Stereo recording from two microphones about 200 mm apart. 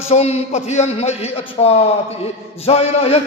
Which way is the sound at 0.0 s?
30° left (ahead or behind).